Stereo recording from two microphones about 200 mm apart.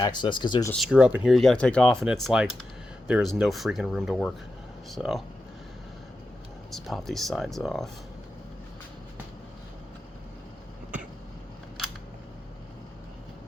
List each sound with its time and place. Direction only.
0.0 s speech: 20° left (ahead or behind)
0.7 s speech: centre (ahead or behind)
6.7 s speech: centre (ahead or behind)